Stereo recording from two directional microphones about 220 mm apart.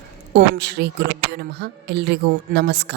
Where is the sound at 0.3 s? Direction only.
45° right (ahead or behind).